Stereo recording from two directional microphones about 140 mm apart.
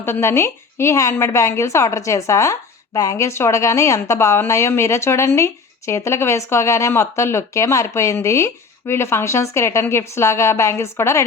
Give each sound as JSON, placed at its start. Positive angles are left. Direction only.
{"t": 0.0, "sound": "a woman's voice", "side_deg": 20}